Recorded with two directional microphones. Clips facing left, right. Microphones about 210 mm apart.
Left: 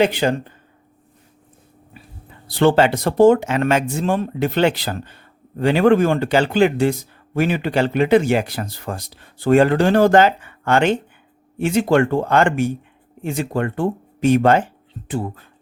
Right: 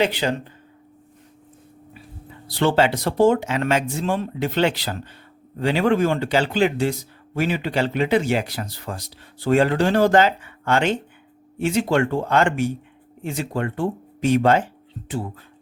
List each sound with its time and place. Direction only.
0.0 s speech: 50° left (ahead or behind)
2.6 s speech: 50° left (ahead or behind)